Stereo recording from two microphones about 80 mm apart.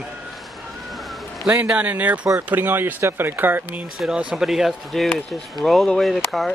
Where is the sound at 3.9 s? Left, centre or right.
Centre.